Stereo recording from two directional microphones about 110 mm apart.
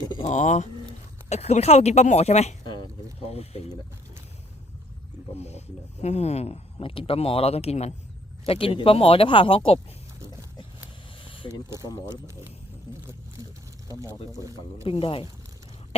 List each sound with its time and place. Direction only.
0.3 s speech: 90° left
3.2 s speech: 65° left (ahead or behind)
5.4 s speech: 80° left
8.4 s speech: 55° left (ahead or behind)
11.2 s a sound: 50° left (ahead or behind)
11.9 s speech: 35° left (ahead or behind)
14.3 s speech: 30° right (ahead or behind)
14.8 s speech: 55° left (ahead or behind)